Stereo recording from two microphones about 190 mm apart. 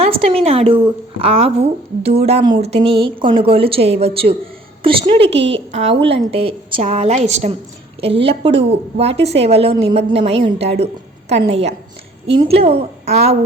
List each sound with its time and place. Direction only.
0.0 s a woman's voice: 30° right (ahead or behind)